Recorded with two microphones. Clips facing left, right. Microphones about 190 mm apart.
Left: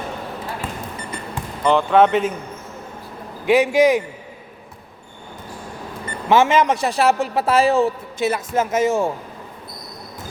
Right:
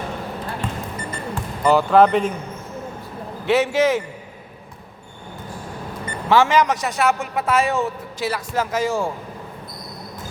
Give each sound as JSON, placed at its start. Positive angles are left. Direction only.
{"t": 0.6, "sound": "a sound", "side_deg": 5}
{"t": 1.6, "sound": "speech", "side_deg": -5}
{"t": 3.4, "sound": "a man's voice", "side_deg": 15}
{"t": 6.2, "sound": "a man's voice", "side_deg": 20}
{"t": 8.3, "sound": "speech", "side_deg": 20}